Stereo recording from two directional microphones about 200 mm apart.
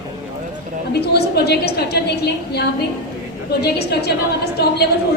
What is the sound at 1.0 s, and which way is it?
A woman's voice, 55° left (ahead or behind).